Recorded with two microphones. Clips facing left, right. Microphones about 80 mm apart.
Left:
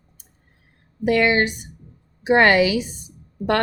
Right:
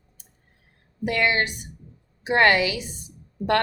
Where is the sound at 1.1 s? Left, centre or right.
Left.